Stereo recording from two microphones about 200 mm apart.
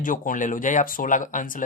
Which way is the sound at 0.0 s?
40° left (ahead or behind).